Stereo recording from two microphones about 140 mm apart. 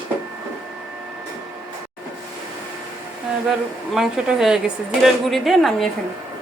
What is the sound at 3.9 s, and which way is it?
A woman's voice, 5° right (ahead or behind).